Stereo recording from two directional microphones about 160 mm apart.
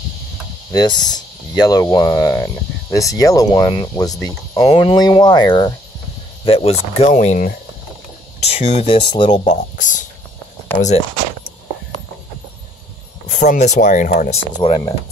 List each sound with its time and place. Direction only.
0.7 s speech: 25° left (ahead or behind)
6.4 s speech: 35° left (ahead or behind); by 7.5 s 55° left (ahead or behind)
8.4 s speech: 40° left (ahead or behind)
9.8 s speech: 55° left (ahead or behind)
13.3 s speech: 50° left (ahead or behind)